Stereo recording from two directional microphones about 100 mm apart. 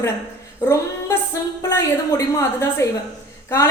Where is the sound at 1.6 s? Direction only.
30° left (ahead or behind).